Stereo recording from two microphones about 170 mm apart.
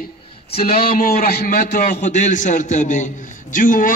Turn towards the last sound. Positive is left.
turn(degrees=50)  # may be behind; listen again after turning